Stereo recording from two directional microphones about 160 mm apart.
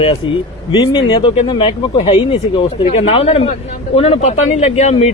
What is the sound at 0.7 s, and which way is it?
Speech, 30° left (ahead or behind).